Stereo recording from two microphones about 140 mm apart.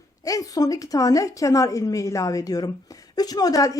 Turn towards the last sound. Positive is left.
turn(degrees=25)  # may be behind; listen again after turning